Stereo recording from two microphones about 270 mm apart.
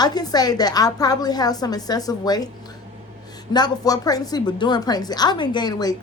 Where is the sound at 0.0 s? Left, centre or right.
Centre.